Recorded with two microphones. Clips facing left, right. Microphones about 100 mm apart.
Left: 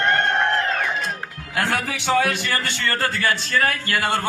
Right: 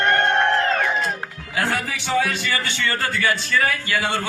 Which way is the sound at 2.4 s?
50° left (ahead or behind).